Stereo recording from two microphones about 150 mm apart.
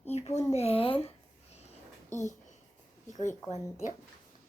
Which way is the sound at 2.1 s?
55° left (ahead or behind).